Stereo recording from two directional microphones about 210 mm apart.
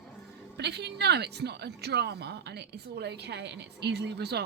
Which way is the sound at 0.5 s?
50° right (ahead or behind).